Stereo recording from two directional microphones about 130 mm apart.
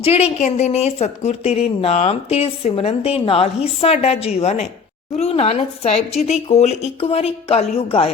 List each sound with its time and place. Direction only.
0.0 s speech: 50° left (ahead or behind)